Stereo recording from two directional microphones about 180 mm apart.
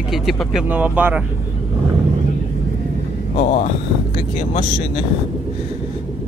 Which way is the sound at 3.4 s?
40° left (ahead or behind).